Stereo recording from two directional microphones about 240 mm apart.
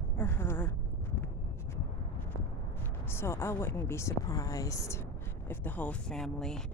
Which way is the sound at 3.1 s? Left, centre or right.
Centre.